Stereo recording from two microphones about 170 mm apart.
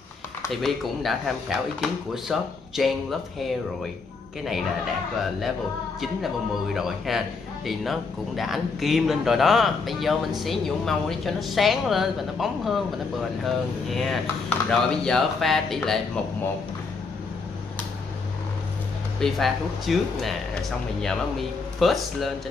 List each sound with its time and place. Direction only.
0.5 s speech: centre (ahead or behind)
5.9 s speech: centre (ahead or behind)
19.1 s speech: centre (ahead or behind)